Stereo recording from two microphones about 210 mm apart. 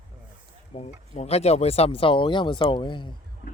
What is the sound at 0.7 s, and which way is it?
Speech, 30° left (ahead or behind).